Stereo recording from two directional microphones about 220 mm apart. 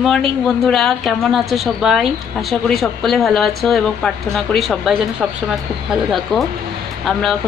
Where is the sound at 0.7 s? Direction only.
Centre (ahead or behind).